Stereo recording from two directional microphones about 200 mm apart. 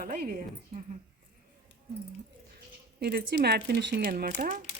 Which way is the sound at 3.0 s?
50° right (ahead or behind).